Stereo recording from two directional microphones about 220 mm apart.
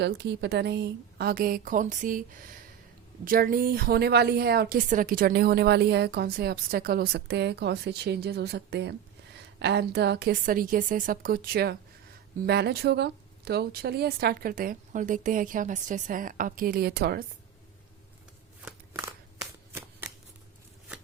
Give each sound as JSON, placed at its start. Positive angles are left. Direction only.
{"t": 0.0, "sound": "a woman's voice", "side_deg": -50}
{"t": 18.6, "sound": "a sound", "side_deg": -5}
{"t": 19.4, "sound": "shuffling cards", "side_deg": -10}